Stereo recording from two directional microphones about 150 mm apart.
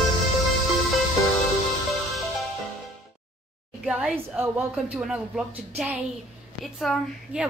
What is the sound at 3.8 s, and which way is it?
A woman's voice, 5° right (ahead or behind).